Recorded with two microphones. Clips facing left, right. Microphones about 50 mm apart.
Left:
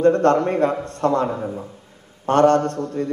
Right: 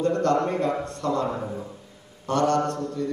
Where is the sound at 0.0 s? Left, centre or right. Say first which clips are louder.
Left 6 dB; left.